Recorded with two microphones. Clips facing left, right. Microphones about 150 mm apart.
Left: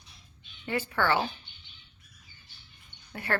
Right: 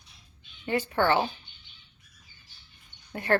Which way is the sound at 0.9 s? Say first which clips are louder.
Right 3 dB; 20° right (ahead or behind).